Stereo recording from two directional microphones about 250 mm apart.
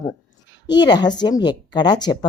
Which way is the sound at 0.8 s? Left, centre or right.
Centre.